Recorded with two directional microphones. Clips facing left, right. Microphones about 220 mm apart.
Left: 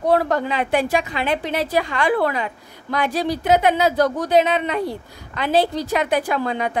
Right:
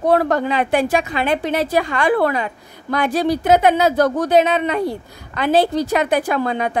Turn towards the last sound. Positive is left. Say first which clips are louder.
# right 2 dB
turn(degrees=-50)  # may be behind; listen again after turning